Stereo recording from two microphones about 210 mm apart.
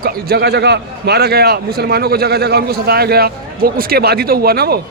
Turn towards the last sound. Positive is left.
turn(degrees=-50)  # may be behind; listen again after turning